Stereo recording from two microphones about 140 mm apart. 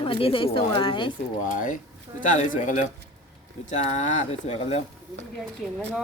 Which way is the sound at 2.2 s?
65° left (ahead or behind).